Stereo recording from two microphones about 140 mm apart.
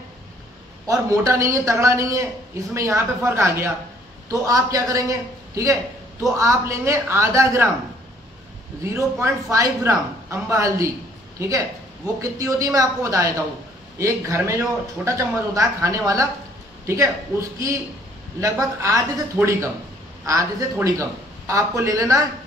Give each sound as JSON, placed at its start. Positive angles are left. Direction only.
{"t": 0.8, "sound": "speech", "side_deg": -25}
{"t": 8.8, "sound": "a man's voice", "side_deg": -20}